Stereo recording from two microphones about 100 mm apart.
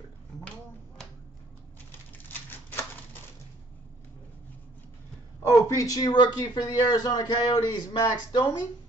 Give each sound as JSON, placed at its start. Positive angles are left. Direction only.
{"t": 0.4, "sound": "a sound", "side_deg": 10}
{"t": 1.9, "sound": "patter", "side_deg": 20}
{"t": 5.7, "sound": "speech", "side_deg": 35}